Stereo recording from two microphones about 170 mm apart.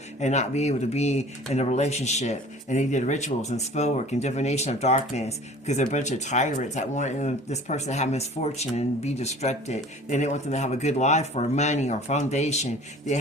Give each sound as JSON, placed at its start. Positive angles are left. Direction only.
{"t": 0.2, "sound": "speech", "side_deg": 40}